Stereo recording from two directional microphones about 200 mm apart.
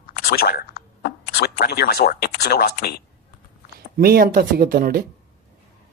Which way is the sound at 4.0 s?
45° right (ahead or behind).